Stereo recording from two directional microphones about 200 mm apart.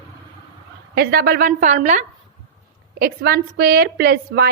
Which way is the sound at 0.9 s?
50° right (ahead or behind).